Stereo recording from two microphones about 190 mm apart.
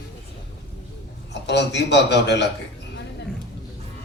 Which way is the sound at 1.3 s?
65° left (ahead or behind).